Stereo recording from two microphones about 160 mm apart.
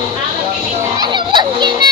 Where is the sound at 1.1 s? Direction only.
30° right (ahead or behind).